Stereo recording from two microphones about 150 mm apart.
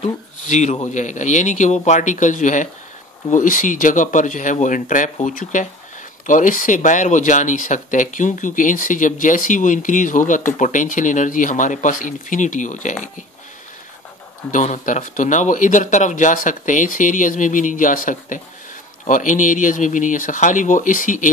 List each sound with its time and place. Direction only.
0.5 s a man's voice: 55° left (ahead or behind)
14.5 s speech: 55° left (ahead or behind)